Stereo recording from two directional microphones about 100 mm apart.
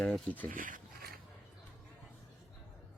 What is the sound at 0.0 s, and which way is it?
Speech, 15° left (ahead or behind).